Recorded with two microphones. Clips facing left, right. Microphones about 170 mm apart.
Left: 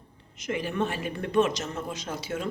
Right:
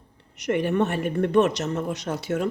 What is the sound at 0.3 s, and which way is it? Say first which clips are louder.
Speech: right 7 dB; 65° right (ahead or behind).